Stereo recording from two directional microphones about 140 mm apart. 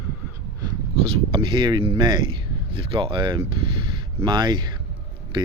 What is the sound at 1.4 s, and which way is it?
Speech, 35° right (ahead or behind).